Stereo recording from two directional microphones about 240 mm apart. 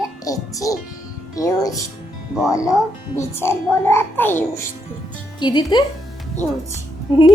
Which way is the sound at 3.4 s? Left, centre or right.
Centre.